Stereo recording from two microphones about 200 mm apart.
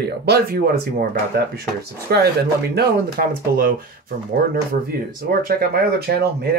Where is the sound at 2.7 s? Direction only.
45° right (ahead or behind).